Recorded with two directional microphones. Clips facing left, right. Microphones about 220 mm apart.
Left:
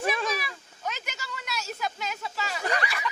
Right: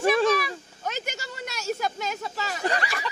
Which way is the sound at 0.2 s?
40° right (ahead or behind).